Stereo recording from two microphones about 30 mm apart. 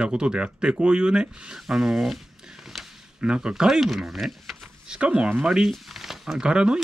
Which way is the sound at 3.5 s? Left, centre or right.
Centre.